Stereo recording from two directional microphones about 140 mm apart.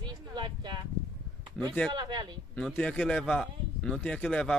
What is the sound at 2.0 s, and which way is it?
Speech, 30° right (ahead or behind).